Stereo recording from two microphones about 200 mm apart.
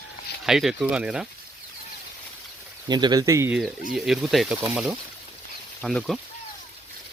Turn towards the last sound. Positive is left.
turn(degrees=0)  # may be behind; listen again after turning